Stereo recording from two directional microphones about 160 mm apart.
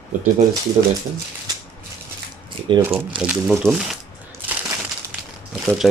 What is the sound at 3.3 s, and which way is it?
Speech, 10° right (ahead or behind).